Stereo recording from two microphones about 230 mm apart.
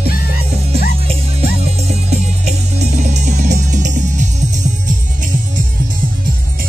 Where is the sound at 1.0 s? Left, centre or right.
Right.